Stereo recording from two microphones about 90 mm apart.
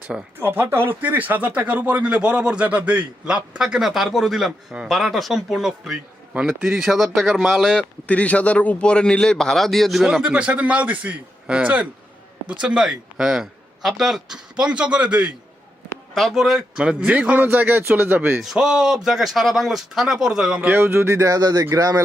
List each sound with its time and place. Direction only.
0.3 s speech: 25° right (ahead or behind); by 7.9 s centre (ahead or behind)
8.0 s a man's voice: 15° left (ahead or behind); by 15.3 s 15° right (ahead or behind)
16.1 s a man's voice: centre (ahead or behind); by 18.4 s 20° right (ahead or behind)
18.4 s a man's voice: 5° right (ahead or behind)
20.6 s speech: 25° right (ahead or behind); by 22.0 s 40° right (ahead or behind)